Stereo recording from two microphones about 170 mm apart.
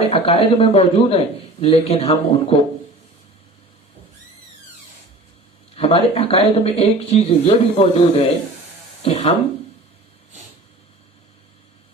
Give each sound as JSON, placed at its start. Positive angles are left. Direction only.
{"t": 0.1, "sound": "speech", "side_deg": 35}
{"t": 5.8, "sound": "speech", "side_deg": 35}